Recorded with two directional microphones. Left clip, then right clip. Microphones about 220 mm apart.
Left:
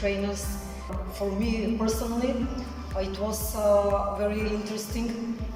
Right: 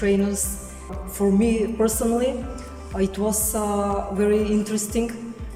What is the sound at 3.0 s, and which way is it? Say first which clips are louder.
Speech: right 6 dB; 50° right (ahead or behind).